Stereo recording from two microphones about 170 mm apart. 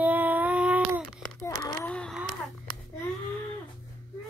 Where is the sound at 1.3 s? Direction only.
15° left (ahead or behind).